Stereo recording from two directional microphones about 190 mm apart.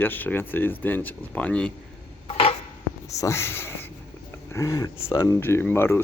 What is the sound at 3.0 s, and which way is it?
Speech, 15° left (ahead or behind).